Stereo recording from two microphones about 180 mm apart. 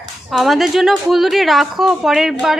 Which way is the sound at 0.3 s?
Centre (ahead or behind).